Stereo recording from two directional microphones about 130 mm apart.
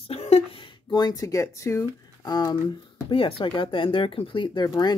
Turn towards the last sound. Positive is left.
turn(degrees=30)  # may be behind; listen again after turning